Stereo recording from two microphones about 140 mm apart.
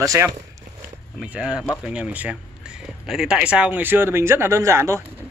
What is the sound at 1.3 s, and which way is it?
Speech, 5° right (ahead or behind).